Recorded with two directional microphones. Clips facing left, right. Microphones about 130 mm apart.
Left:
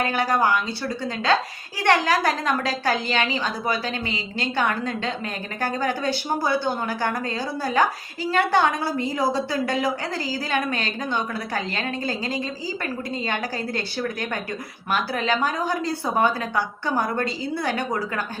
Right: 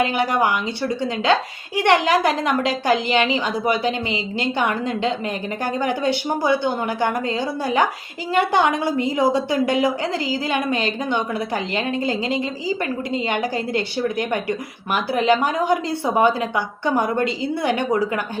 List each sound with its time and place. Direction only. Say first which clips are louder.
0.0 s a woman's voice: right 2 dB; 20° right (ahead or behind)